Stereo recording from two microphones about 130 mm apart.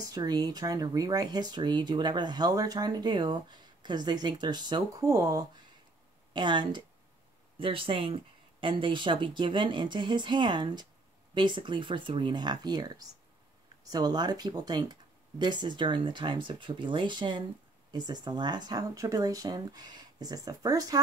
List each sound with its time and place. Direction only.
0.0 s speech: 30° right (ahead or behind)
6.3 s speech: 35° right (ahead or behind)